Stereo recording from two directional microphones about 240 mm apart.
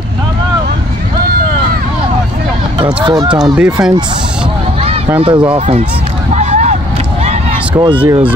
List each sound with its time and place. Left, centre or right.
3.3 s speech: centre
5.2 s speech: right
6.3 s a sound: right
7.7 s speech: centre
8.0 s speech: centre